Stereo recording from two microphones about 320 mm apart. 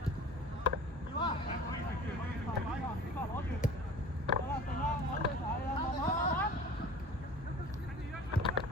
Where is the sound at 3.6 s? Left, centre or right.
Left.